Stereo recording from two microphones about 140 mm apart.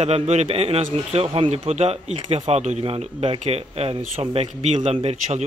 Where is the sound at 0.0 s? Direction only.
50° right (ahead or behind).